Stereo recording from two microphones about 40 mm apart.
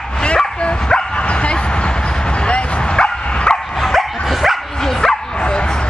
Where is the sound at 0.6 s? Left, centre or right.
Left.